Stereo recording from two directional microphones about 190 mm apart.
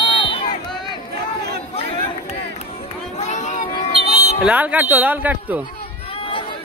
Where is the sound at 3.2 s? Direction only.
35° left (ahead or behind).